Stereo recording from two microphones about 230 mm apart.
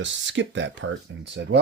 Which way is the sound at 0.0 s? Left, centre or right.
Right.